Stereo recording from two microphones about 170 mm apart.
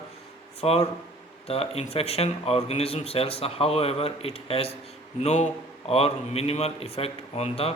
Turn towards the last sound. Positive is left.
turn(degrees=35)  # may be behind; listen again after turning